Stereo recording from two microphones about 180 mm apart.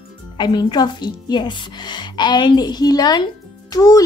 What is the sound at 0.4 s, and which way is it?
Speech, 25° left (ahead or behind).